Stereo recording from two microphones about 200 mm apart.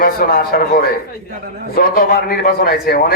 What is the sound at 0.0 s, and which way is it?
A man's voice, 45° left (ahead or behind).